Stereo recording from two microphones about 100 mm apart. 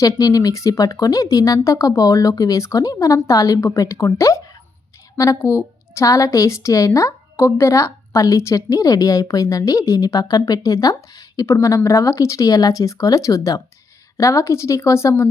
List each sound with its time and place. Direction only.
0.0 s a woman's voice: 40° left (ahead or behind)